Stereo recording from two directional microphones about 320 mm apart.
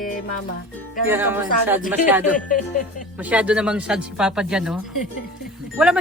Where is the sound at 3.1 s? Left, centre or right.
Centre.